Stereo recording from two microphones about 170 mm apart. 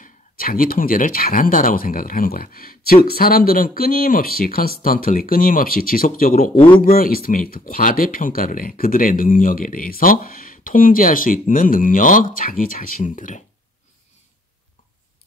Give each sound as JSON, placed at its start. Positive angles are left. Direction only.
{"t": 0.0, "sound": "speech", "side_deg": 55}